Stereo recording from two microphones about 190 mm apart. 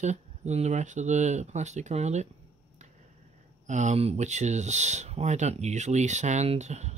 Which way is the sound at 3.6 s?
40° right (ahead or behind).